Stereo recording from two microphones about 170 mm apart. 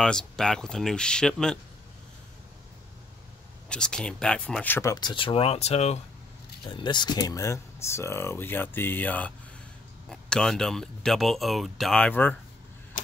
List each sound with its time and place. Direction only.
0.0 s speech: 5° left (ahead or behind)
3.6 s speech: 5° left (ahead or behind)
4.9 s speech: 30° left (ahead or behind); by 12.4 s 10° left (ahead or behind)